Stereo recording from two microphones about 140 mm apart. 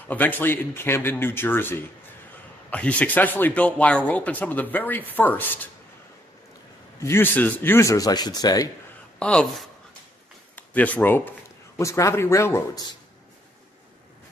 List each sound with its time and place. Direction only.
0.0 s speech: 10° left (ahead or behind)
7.0 s speech: 15° left (ahead or behind)
9.2 s speech: 5° left (ahead or behind)